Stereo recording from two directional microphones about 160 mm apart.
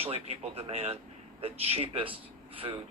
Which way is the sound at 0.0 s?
40° right (ahead or behind).